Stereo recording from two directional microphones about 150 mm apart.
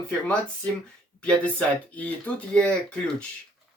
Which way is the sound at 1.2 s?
10° left (ahead or behind).